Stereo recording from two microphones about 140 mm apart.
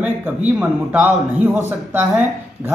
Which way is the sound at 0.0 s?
10° right (ahead or behind).